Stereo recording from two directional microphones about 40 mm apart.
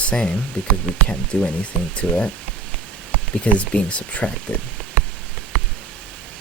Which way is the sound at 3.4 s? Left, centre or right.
Left.